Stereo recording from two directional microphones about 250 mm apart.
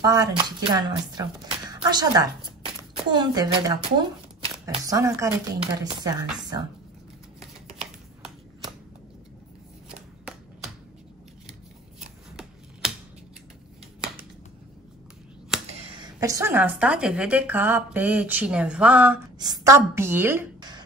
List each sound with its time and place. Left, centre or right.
0.0 s a woman's voice: centre
7.3 s shuffling cards: centre
15.9 s speech: centre
19.3 s speech: centre